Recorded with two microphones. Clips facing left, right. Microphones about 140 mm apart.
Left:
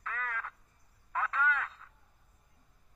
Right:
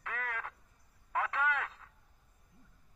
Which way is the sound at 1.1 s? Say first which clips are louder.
Left 1 dB; 70° right (ahead or behind).